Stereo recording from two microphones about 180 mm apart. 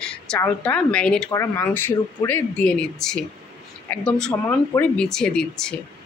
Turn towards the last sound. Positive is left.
turn(degrees=5)  # may be behind; listen again after turning